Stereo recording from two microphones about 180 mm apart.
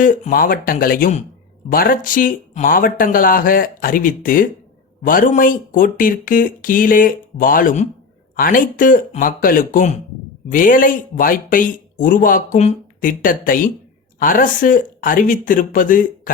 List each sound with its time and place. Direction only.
0.0 s speech: 50° left (ahead or behind)